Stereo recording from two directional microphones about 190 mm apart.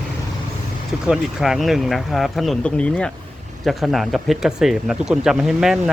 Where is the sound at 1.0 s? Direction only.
Centre (ahead or behind).